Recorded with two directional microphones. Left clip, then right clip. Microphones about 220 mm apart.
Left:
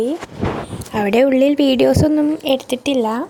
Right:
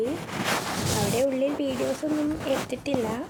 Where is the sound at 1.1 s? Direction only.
45° left (ahead or behind).